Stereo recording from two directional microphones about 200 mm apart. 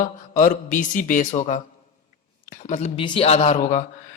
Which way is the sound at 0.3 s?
40° left (ahead or behind).